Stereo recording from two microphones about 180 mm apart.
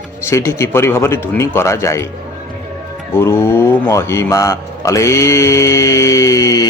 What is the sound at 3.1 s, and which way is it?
Speech, 15° left (ahead or behind).